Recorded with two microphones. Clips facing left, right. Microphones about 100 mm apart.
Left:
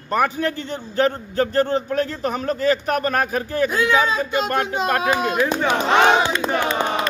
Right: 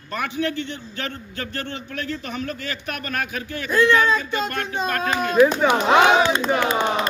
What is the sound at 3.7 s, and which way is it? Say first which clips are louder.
Speech: right 5 dB; 15° left (ahead or behind).